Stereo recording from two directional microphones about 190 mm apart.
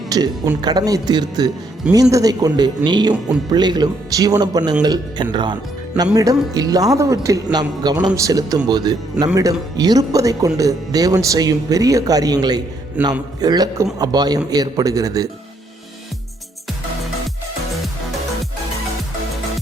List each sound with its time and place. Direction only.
0.1 s a man's voice: 20° right (ahead or behind)